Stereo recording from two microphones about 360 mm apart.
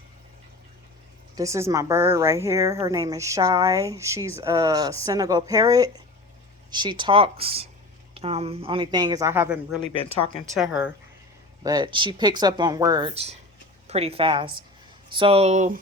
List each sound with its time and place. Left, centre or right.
1.4 s a woman's voice: centre